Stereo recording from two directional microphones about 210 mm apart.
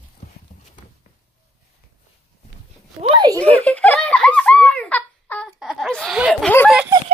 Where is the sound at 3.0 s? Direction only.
20° right (ahead or behind).